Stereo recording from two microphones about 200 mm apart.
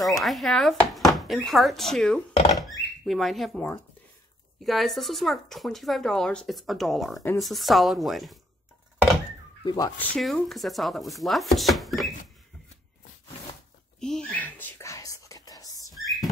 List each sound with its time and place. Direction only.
0.0 s speech: centre (ahead or behind)
9.7 s speech: 20° left (ahead or behind); by 12.1 s centre (ahead or behind)
13.9 s whispering: 5° left (ahead or behind)
15.9 s a sound: centre (ahead or behind)